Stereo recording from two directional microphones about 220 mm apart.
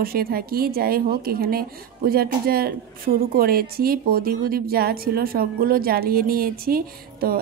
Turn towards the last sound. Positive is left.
turn(degrees=-40)  # may be behind; listen again after turning